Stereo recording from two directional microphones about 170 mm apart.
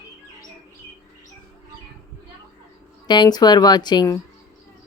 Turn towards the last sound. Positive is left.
turn(degrees=20)  # may be behind; listen again after turning